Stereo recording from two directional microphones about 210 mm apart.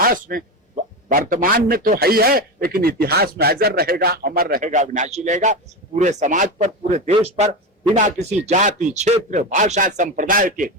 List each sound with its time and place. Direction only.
0.0 s a man's voice: 40° right (ahead or behind)